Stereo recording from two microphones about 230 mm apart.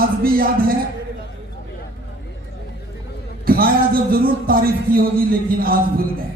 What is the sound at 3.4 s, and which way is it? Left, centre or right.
A man's voice, right.